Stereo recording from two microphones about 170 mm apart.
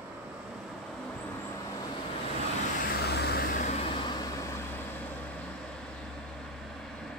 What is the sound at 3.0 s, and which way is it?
Vehicle, 70° left (ahead or behind).